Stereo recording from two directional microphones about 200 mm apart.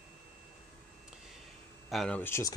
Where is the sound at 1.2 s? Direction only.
Centre (ahead or behind).